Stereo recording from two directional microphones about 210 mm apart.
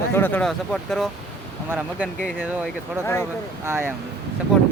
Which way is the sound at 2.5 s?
10° right (ahead or behind).